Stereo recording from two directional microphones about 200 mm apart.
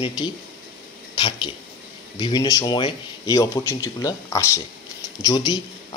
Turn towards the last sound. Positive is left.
turn(degrees=20)  # may be behind; listen again after turning